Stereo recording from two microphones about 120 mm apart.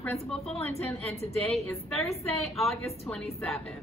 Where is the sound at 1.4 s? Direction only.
5° left (ahead or behind).